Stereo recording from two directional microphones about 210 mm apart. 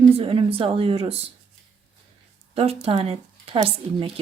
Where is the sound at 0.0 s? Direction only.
25° right (ahead or behind).